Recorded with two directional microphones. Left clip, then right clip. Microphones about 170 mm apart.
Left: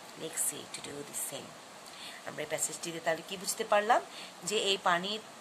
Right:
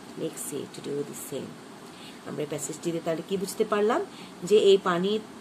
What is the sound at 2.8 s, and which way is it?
Speech, 55° left (ahead or behind).